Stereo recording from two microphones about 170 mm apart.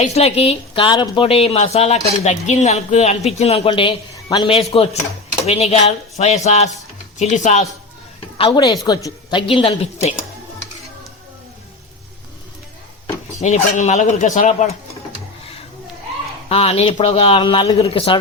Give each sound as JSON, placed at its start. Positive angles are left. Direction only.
{"t": 0.0, "sound": "a woman's voice", "side_deg": 40}
{"t": 8.4, "sound": "a woman's voice", "side_deg": 25}
{"t": 9.5, "sound": "a woman's voice", "side_deg": 35}
{"t": 13.4, "sound": "a man's voice", "side_deg": 45}
{"t": 16.5, "sound": "a woman's voice", "side_deg": 35}